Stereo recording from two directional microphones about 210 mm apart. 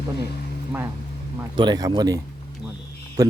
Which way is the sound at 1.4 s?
20° right (ahead or behind).